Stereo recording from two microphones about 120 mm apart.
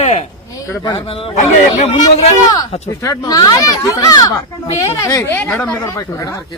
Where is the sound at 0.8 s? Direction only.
45° left (ahead or behind).